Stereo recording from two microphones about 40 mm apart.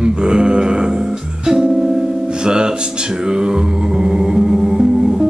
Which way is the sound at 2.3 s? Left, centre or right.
Right.